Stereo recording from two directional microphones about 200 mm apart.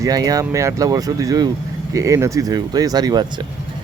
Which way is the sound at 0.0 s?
20° right (ahead or behind).